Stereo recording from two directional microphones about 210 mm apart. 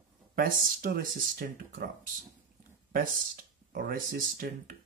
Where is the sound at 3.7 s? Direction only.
45° right (ahead or behind).